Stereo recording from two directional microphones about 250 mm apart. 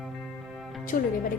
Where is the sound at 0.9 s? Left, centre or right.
Left.